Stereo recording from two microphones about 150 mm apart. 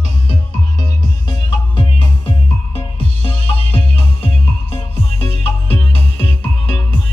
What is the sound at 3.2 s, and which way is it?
Music, 40° left (ahead or behind).